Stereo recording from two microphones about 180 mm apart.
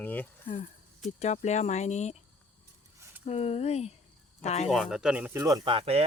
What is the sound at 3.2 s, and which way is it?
Speech, 35° left (ahead or behind).